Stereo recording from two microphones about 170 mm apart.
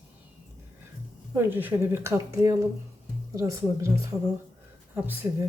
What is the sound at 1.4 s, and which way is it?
Speech, 10° right (ahead or behind).